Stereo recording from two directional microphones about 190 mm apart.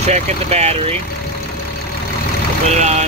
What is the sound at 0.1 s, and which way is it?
Speech, 35° right (ahead or behind).